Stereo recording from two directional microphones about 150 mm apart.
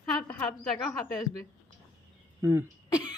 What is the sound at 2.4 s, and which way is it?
Speech, 15° right (ahead or behind).